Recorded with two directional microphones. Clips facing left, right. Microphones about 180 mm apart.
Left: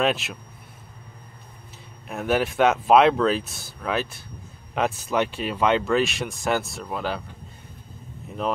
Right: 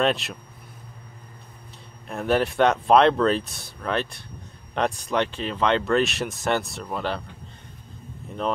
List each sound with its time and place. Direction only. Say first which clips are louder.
0.0 s speech: even; centre (ahead or behind)
2.0 s speech: right 1 dB; centre (ahead or behind)
8.3 s speech: even; 5° left (ahead or behind)